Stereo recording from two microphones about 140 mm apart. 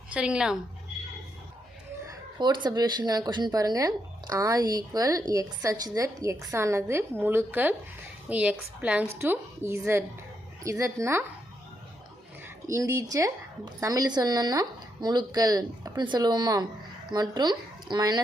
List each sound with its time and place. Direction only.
0.1 s a woman's voice: 5° right (ahead or behind)
2.6 s a woman's voice: 30° right (ahead or behind)
12.6 s a woman's voice: 20° right (ahead or behind)